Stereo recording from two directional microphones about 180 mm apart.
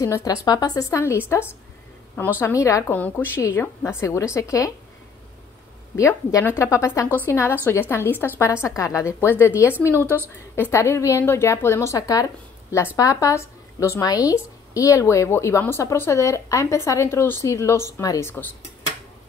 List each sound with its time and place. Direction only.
0.0 s a woman's voice: 20° left (ahead or behind)
2.4 s a woman's voice: 15° left (ahead or behind)
5.9 s a woman's voice: 15° left (ahead or behind)